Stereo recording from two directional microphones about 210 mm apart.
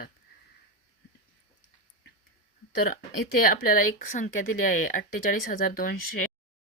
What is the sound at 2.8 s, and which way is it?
A woman's voice, 45° left (ahead or behind).